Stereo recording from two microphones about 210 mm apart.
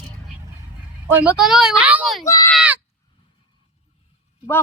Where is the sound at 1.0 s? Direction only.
10° right (ahead or behind).